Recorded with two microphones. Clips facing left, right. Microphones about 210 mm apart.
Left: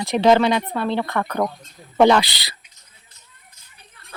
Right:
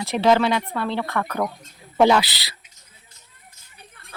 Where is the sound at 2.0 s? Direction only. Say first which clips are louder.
Left 2 dB; 5° right (ahead or behind).